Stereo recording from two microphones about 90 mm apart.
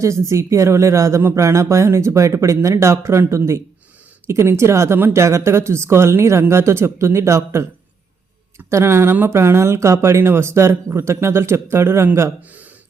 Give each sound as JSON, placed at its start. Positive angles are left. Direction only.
{"t": 0.0, "sound": "speech", "side_deg": -35}
{"t": 12.4, "sound": "speech", "side_deg": -15}